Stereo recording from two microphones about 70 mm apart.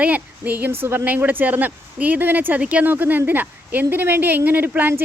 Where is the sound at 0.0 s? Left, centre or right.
Right.